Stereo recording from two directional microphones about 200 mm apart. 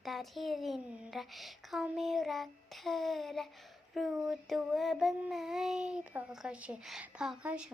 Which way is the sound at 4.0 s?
Centre (ahead or behind).